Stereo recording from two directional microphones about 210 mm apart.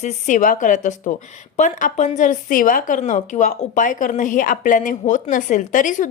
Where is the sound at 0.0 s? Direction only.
35° left (ahead or behind).